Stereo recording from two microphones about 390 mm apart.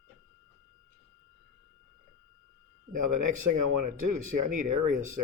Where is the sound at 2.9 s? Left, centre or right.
Right.